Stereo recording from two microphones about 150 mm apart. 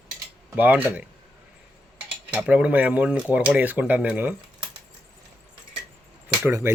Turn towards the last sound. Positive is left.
turn(degrees=-15)  # may be behind; listen again after turning